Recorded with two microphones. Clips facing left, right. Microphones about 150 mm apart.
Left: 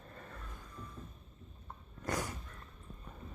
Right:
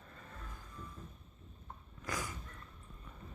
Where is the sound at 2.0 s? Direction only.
60° left (ahead or behind).